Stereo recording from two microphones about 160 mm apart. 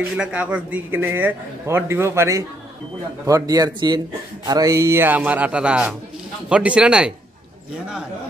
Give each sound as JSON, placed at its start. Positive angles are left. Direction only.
{"t": 0.2, "sound": "a man's voice", "side_deg": -10}